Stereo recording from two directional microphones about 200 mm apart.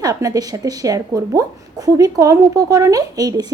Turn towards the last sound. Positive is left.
turn(degrees=-20)  # may be behind; listen again after turning